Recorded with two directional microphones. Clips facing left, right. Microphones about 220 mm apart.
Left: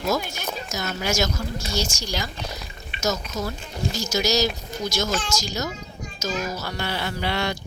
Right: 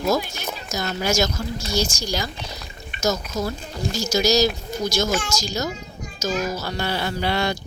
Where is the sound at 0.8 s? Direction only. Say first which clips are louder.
Right 3 dB; 35° right (ahead or behind).